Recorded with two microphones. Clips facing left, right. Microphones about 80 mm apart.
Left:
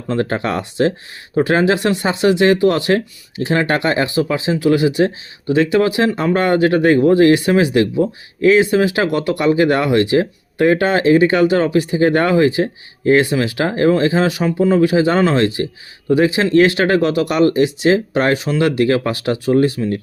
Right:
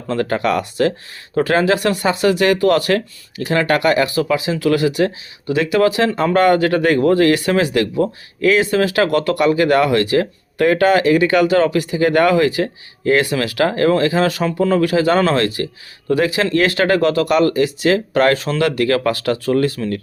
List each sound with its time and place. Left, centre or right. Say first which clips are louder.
0.1 s speech: right 1 dB; left